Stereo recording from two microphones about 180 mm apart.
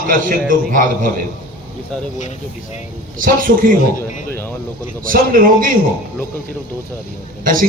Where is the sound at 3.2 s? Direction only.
50° right (ahead or behind).